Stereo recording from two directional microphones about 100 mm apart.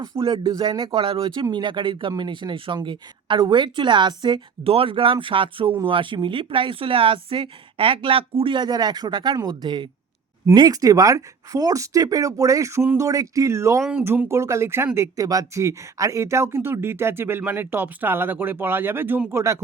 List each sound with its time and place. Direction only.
0.2 s speech: 50° right (ahead or behind)
0.9 s speech: 60° right (ahead or behind)
4.6 s speech: 70° right (ahead or behind); by 9.9 s 50° right (ahead or behind)
10.5 s speech: 40° right (ahead or behind)